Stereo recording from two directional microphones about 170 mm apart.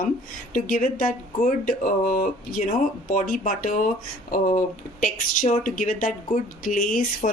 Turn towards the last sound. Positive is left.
turn(degrees=50)  # may be behind; listen again after turning